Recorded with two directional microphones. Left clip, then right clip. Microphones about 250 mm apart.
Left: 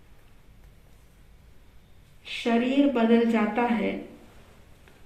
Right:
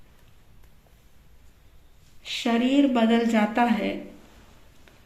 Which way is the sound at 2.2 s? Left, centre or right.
Right.